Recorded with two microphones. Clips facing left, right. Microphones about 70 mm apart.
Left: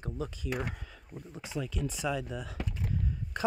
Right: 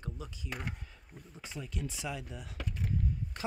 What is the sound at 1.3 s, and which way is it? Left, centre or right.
Speech, left.